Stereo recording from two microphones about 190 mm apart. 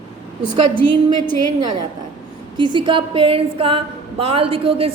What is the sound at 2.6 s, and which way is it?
A woman's voice, 25° right (ahead or behind).